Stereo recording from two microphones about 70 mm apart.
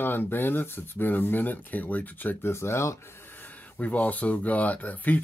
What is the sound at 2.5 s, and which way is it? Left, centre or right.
Speech, left.